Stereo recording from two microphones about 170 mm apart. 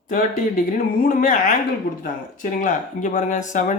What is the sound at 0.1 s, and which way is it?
Speech, 50° left (ahead or behind).